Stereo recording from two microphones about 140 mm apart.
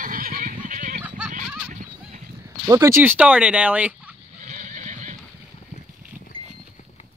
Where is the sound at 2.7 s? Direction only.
20° right (ahead or behind).